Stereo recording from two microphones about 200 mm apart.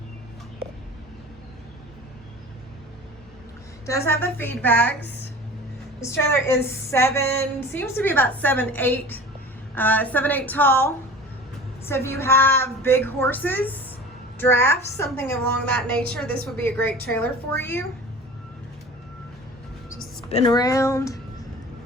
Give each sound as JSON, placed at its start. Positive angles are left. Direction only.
{"t": 3.8, "sound": "a woman's voice", "side_deg": 15}
{"t": 20.3, "sound": "a woman's voice", "side_deg": 20}